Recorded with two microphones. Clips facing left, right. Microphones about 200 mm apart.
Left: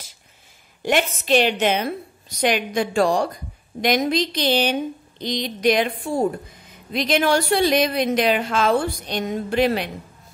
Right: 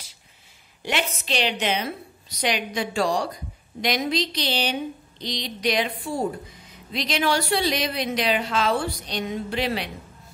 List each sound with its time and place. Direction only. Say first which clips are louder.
0.8 s a woman's voice: left 7 dB; 50° left (ahead or behind)